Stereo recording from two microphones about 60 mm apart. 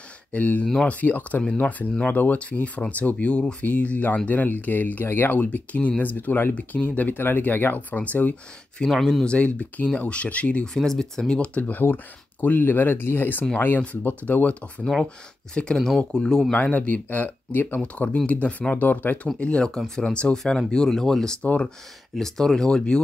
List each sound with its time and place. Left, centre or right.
0.3 s speech: left
10.7 s speech: centre
11.3 s speech: centre
11.8 s speech: left; by 16.5 s centre
16.5 s speech: left
19.2 s speech: centre